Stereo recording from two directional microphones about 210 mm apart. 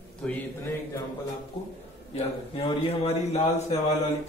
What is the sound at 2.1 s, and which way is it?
A man's voice, 30° left (ahead or behind).